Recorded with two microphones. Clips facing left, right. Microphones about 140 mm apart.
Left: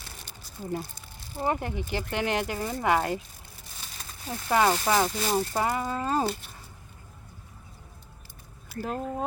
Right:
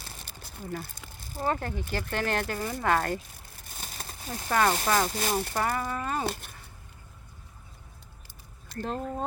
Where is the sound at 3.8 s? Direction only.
45° right (ahead or behind).